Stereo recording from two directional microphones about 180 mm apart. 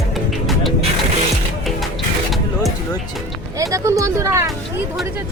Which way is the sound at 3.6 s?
15° right (ahead or behind).